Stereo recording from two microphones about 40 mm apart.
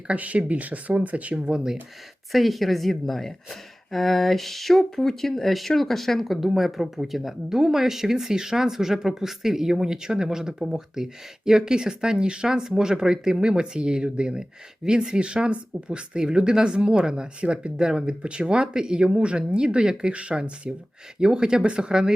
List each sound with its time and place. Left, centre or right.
0.2 s speech: right
1.5 s speech: centre
2.3 s speech: centre; by 21.9 s right